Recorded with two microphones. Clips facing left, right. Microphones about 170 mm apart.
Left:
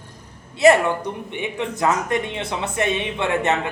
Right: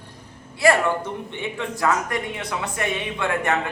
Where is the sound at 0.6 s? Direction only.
20° left (ahead or behind).